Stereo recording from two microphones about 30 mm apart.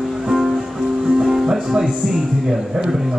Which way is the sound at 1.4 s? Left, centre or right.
Right.